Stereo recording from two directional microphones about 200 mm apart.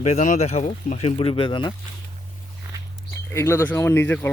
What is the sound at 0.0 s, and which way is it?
Speech, 35° left (ahead or behind).